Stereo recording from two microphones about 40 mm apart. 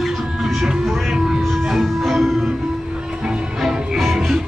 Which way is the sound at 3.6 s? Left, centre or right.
Centre.